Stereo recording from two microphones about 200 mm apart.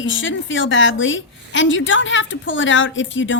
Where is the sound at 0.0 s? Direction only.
70° left (ahead or behind).